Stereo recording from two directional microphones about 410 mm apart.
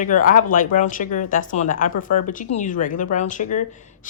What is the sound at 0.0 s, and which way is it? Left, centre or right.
A woman's voice, centre.